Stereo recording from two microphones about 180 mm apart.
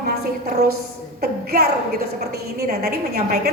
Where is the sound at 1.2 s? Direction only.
60° right (ahead or behind).